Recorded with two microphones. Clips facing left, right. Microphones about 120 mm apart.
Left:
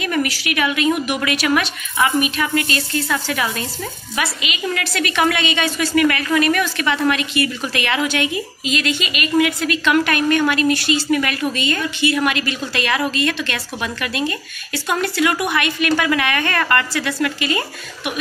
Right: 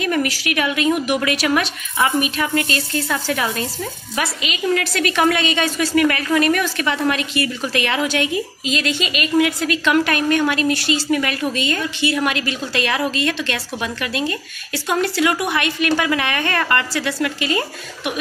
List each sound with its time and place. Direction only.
0.0 s a woman's voice: 40° right (ahead or behind)